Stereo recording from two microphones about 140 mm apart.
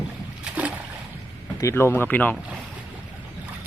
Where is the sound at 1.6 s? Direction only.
15° left (ahead or behind).